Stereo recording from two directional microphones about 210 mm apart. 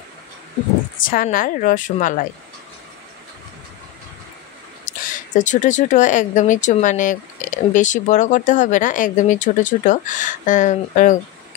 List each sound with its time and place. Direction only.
1.0 s speech: 40° left (ahead or behind)
4.8 s speech: 35° left (ahead or behind)